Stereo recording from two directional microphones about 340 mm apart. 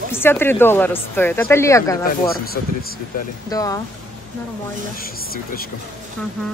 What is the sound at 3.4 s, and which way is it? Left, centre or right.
Speech, centre.